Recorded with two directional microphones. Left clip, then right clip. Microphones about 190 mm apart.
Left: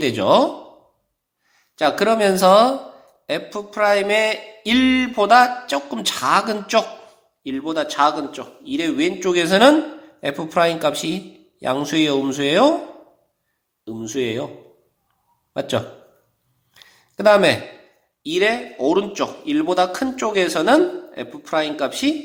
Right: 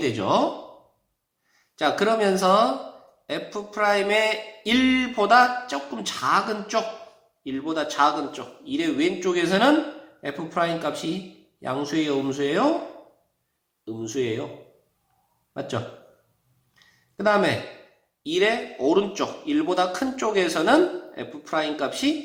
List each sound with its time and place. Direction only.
0.0 s a man's voice: 40° left (ahead or behind)
1.7 s a man's voice: 40° left (ahead or behind)
13.8 s a man's voice: 40° left (ahead or behind)
15.5 s a man's voice: 40° left (ahead or behind)
16.7 s a sound: 40° left (ahead or behind)
18.2 s a man's voice: 40° left (ahead or behind)